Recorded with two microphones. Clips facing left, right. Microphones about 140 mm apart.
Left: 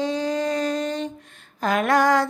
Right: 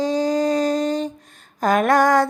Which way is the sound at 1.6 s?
45° right (ahead or behind).